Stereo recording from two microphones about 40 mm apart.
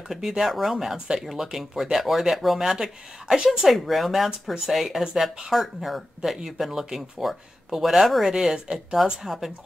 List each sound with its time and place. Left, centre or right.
0.1 s speech: centre
0.9 s speech: centre
1.2 s speech: centre
9.0 s speech: centre